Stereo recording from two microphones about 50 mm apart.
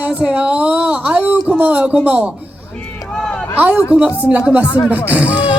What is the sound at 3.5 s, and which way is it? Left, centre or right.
A man's voice, right.